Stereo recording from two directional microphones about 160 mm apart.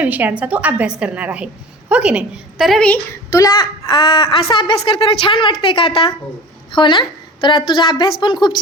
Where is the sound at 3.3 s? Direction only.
20° left (ahead or behind).